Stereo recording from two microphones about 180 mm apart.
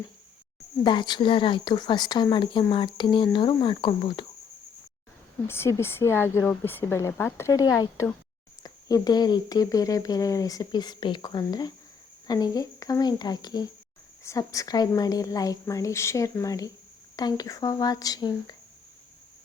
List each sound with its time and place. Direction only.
0.9 s speech: 25° left (ahead or behind)
5.5 s speech: 15° left (ahead or behind)